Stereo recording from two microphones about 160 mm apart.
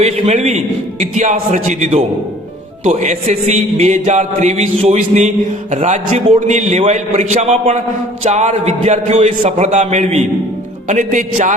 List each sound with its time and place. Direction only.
0.0 s music: 45° right (ahead or behind)